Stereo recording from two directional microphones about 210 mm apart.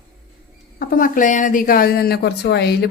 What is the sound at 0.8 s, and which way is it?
Speech, 40° left (ahead or behind).